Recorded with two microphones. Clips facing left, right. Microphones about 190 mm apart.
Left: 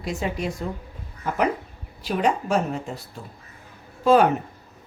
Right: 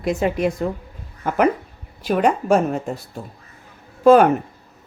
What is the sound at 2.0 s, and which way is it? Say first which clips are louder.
Speech: right 5 dB; 50° right (ahead or behind).